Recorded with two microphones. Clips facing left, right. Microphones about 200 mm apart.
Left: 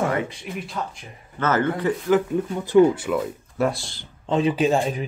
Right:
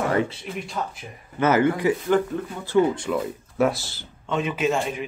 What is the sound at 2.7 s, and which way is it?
Speech, 5° left (ahead or behind).